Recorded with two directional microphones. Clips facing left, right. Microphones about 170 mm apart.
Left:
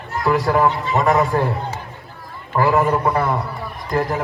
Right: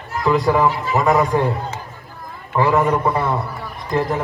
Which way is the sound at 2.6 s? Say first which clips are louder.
Even; centre (ahead or behind).